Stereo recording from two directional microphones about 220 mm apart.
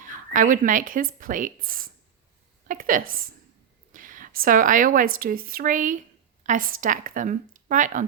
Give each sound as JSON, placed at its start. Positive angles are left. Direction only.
{"t": 0.0, "sound": "speech", "side_deg": -35}